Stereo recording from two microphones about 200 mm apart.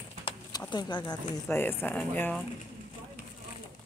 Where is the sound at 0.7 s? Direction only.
25° left (ahead or behind).